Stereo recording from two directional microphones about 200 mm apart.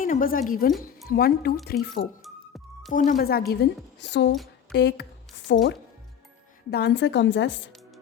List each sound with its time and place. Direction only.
0.0 s a woman's voice: 45° left (ahead or behind)
2.9 s a woman's voice: 40° left (ahead or behind); by 5.6 s 60° left (ahead or behind)
6.7 s a woman's voice: 55° left (ahead or behind)